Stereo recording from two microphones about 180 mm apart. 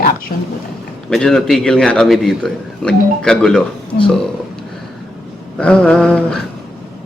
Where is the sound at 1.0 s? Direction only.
5° left (ahead or behind).